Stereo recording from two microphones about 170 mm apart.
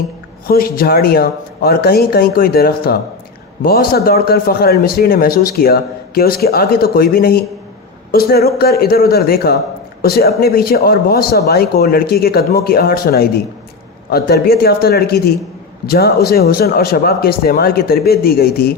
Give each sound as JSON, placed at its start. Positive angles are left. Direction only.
{"t": 0.4, "sound": "a man's voice", "side_deg": 60}